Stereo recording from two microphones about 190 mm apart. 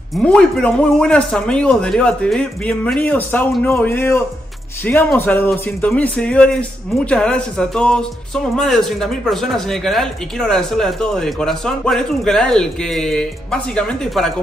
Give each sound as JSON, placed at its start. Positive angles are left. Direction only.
{"t": 0.2, "sound": "speech", "side_deg": 5}